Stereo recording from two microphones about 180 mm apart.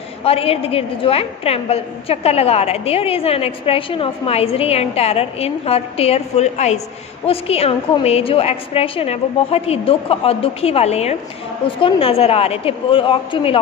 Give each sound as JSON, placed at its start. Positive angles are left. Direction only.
{"t": 0.2, "sound": "a woman's voice", "side_deg": 30}